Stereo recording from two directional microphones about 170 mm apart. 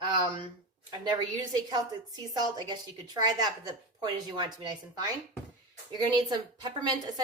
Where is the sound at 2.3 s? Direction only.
25° right (ahead or behind).